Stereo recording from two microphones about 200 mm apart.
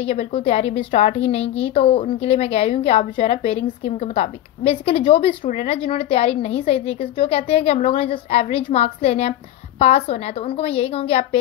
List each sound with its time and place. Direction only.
0.0 s a woman's voice: 30° left (ahead or behind)